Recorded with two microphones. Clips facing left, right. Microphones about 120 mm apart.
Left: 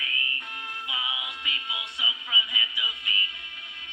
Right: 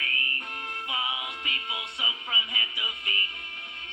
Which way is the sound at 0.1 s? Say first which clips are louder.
Right 1 dB; 40° right (ahead or behind).